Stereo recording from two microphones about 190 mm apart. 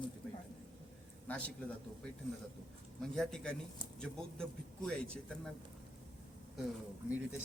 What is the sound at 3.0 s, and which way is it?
A man's voice, centre (ahead or behind).